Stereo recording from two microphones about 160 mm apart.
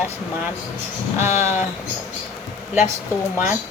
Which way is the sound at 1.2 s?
45° left (ahead or behind).